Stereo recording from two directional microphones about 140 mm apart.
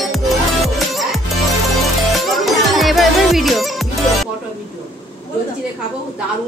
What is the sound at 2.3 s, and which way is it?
Music, centre (ahead or behind).